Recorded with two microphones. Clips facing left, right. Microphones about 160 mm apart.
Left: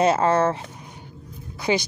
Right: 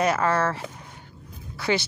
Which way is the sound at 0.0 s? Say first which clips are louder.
Left 4 dB; 25° left (ahead or behind).